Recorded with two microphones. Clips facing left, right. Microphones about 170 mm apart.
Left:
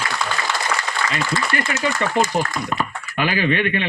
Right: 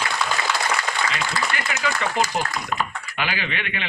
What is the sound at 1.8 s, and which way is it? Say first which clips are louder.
A man's voice: left 3 dB; 50° left (ahead or behind).